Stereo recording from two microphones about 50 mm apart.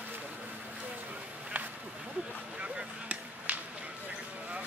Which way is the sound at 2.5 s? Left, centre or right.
Right.